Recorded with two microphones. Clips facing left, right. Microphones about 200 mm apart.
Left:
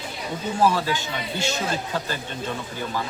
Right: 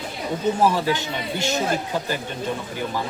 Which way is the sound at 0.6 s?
15° right (ahead or behind).